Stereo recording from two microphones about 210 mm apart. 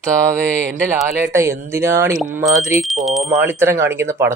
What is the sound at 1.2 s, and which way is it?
Speech, 15° right (ahead or behind).